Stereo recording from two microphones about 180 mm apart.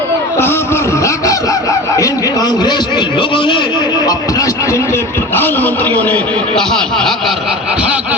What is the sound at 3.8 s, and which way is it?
Speech, 25° left (ahead or behind).